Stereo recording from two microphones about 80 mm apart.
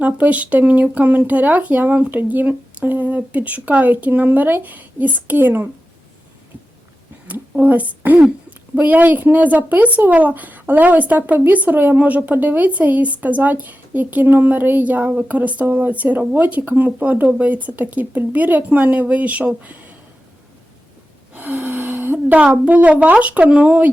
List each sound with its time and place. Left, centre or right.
0.0 s a woman's voice: centre
7.3 s a woman's voice: right
21.3 s a sound: right
22.6 s a woman's voice: centre